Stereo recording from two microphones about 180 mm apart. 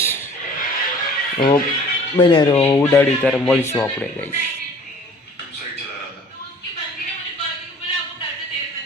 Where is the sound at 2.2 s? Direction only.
30° left (ahead or behind).